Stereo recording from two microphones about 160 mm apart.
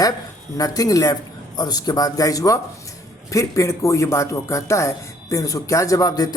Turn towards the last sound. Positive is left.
turn(degrees=25)  # may be behind; listen again after turning